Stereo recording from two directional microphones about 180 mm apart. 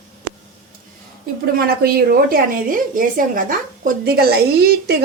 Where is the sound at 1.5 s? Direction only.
55° right (ahead or behind).